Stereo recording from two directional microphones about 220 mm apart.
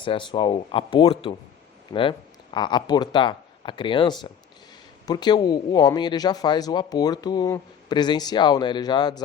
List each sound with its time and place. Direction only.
0.0 s a man's voice: 20° left (ahead or behind)